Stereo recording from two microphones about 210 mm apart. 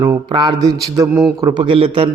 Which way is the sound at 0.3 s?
20° right (ahead or behind).